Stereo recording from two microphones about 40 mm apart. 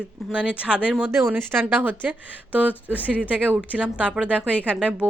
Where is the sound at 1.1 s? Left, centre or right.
Right.